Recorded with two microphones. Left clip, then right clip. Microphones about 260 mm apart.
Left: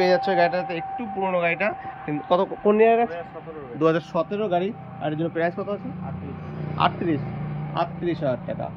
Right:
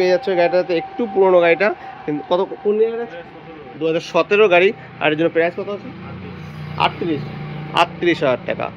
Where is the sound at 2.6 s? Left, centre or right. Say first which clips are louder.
Left 2 dB; centre.